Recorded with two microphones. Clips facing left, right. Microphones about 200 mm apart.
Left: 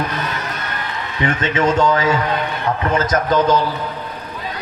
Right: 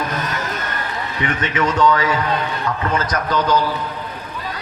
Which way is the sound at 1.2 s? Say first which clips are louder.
Left 3 dB; 25° left (ahead or behind).